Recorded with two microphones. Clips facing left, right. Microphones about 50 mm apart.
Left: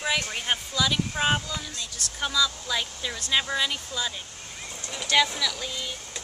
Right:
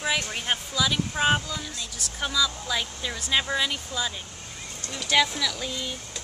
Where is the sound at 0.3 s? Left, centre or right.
Centre.